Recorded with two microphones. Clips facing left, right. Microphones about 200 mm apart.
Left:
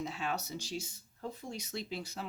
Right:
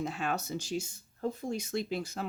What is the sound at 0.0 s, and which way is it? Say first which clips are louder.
Speech: right 4 dB; 50° right (ahead or behind).